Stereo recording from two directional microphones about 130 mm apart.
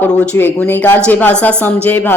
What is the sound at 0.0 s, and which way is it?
Speech, 15° left (ahead or behind).